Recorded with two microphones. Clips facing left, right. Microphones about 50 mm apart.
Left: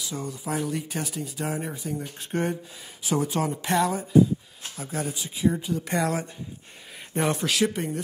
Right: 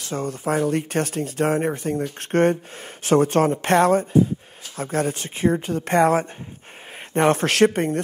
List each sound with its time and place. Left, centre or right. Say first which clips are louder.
0.0 s speech: right 7 dB; right